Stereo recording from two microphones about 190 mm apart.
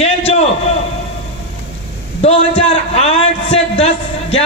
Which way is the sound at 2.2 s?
30° left (ahead or behind).